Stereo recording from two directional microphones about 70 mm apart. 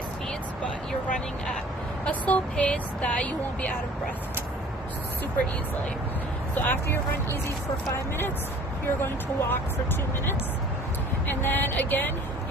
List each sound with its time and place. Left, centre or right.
2.0 s speech: left
6.5 s speech: left
9.0 s speech: left
11.3 s speech: left